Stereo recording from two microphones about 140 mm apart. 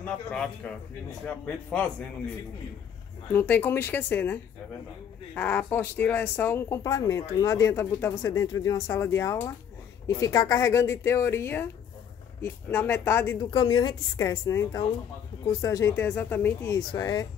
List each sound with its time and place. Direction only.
0.0 s speech: 5° left (ahead or behind)
3.3 s speech: 15° left (ahead or behind)
13.5 s speech: 30° left (ahead or behind)